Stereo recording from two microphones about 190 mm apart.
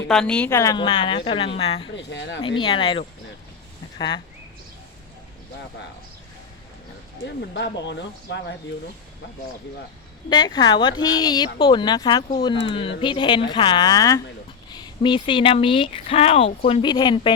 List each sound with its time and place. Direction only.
0.1 s a woman's voice: 5° left (ahead or behind); by 1.9 s 30° left (ahead or behind)
2.0 s speech: 70° left (ahead or behind)
2.6 s a woman's voice: 25° left (ahead or behind)
7.5 s speech: 65° left (ahead or behind)
10.2 s a woman's voice: 20° left (ahead or behind)